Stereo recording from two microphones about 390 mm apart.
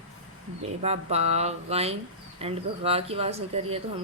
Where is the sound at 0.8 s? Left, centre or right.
Centre.